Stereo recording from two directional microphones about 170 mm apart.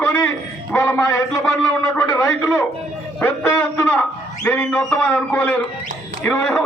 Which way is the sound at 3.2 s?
10° left (ahead or behind).